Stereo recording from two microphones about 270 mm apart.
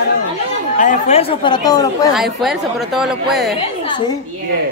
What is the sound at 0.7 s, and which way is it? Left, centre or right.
Speech, left.